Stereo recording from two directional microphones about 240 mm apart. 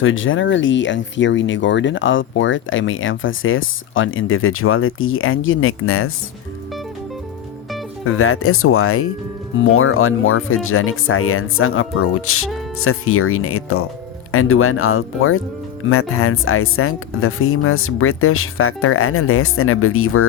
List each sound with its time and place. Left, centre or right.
0.0 s speech: left
8.0 s speech: left